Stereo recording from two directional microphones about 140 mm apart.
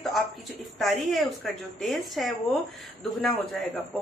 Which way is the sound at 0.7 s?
Centre (ahead or behind).